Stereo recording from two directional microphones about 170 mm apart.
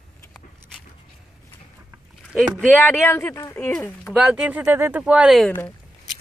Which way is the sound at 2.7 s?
10° left (ahead or behind).